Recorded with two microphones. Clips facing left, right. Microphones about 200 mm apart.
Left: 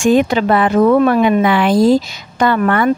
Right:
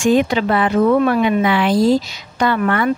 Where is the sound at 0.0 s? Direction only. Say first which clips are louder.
Left 2 dB; 50° left (ahead or behind).